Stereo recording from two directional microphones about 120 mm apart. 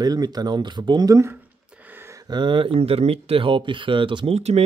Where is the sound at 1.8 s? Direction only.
20° right (ahead or behind).